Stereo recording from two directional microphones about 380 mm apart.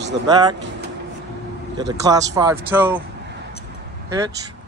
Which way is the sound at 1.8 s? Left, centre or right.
Centre.